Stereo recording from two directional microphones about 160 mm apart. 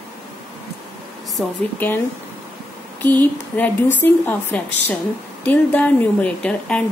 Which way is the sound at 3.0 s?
10° left (ahead or behind).